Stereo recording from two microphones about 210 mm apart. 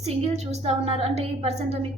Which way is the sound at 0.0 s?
30° right (ahead or behind).